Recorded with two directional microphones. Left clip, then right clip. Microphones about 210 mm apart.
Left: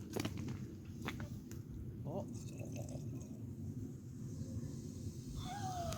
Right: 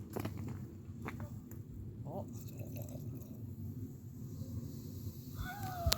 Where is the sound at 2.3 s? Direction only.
Centre (ahead or behind).